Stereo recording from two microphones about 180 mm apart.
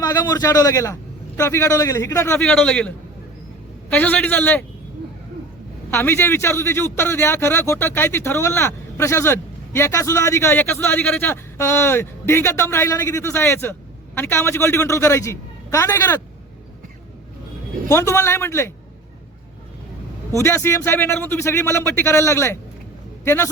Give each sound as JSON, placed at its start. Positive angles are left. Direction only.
{"t": 0.0, "sound": "a man's voice", "side_deg": 20}
{"t": 5.9, "sound": "speech", "side_deg": 10}
{"t": 17.8, "sound": "speech", "side_deg": 15}
{"t": 20.4, "sound": "a man's voice", "side_deg": 15}